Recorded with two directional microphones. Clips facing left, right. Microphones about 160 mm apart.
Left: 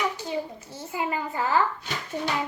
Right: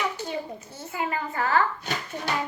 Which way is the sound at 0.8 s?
15° left (ahead or behind).